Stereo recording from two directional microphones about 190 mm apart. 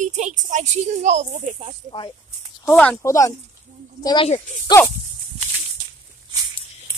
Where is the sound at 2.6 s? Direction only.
5° left (ahead or behind); by 4.3 s 25° left (ahead or behind).